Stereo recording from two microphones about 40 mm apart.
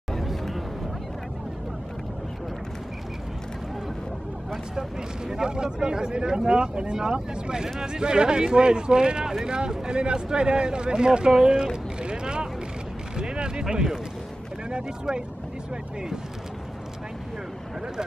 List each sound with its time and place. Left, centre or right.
0.2 s vehicle: centre
5.3 s speech: centre
13.2 s a sound: right
14.7 s speech: right